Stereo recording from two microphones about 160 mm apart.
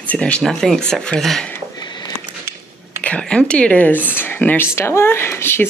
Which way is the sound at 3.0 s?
5° left (ahead or behind).